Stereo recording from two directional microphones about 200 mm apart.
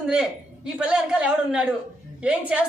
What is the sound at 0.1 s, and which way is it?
A woman's voice, 5° right (ahead or behind).